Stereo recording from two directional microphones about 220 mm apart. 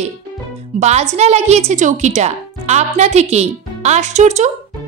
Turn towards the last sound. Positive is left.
turn(degrees=-30)  # may be behind; listen again after turning